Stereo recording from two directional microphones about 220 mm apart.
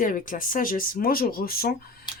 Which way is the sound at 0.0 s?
40° left (ahead or behind).